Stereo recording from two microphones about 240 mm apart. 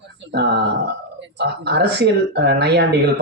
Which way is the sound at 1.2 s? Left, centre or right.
Right.